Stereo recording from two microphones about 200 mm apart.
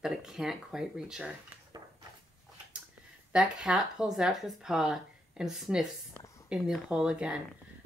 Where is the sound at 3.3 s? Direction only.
5° right (ahead or behind).